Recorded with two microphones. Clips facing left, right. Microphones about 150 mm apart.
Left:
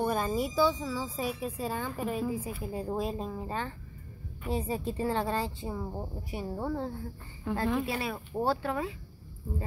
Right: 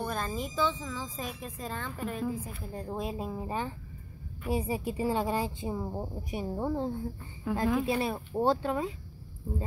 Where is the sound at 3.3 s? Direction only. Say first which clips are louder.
Right 1 dB; 15° right (ahead or behind).